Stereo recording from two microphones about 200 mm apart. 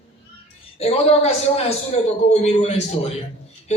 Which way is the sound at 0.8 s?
30° left (ahead or behind).